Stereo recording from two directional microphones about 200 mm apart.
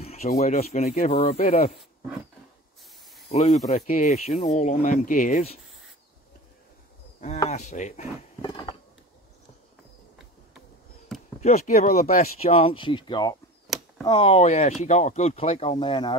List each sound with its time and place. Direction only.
0.0 s speech: 30° left (ahead or behind)
1.7 s wild animals: centre (ahead or behind)
3.3 s speech: 30° left (ahead or behind)
7.4 s speech: 35° left (ahead or behind)
8.4 s a sound: 20° left (ahead or behind)
11.1 s a sound: centre (ahead or behind)
11.4 s speech: 35° left (ahead or behind)
12.4 s speech: 30° left (ahead or behind)
13.7 s a sound: centre (ahead or behind)
14.0 s speech: 25° left (ahead or behind)